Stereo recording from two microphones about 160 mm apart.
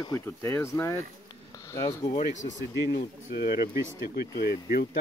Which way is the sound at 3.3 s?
80° left.